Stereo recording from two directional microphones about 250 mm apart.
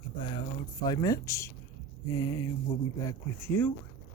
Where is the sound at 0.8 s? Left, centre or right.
Centre.